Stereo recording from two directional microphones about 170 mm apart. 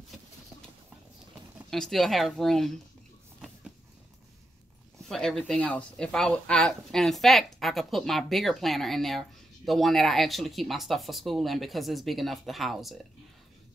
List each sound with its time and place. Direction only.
1.7 s speech: centre (ahead or behind)
3.3 s a sound: centre (ahead or behind)
5.0 s speech: centre (ahead or behind)